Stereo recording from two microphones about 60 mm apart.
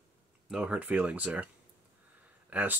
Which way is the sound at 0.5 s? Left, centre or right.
Centre.